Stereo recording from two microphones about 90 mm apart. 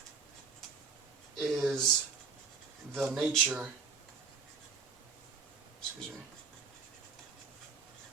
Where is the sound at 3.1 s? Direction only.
15° right (ahead or behind).